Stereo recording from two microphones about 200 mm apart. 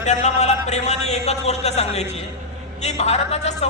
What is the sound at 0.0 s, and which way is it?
A man's voice, 35° left (ahead or behind).